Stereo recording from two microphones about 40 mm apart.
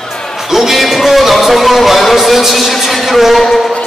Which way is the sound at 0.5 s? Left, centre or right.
Centre.